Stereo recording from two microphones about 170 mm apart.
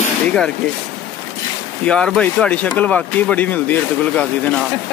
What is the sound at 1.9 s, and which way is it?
Speech, 5° left (ahead or behind).